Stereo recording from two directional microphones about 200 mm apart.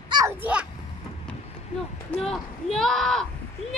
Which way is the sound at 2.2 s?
Centre (ahead or behind).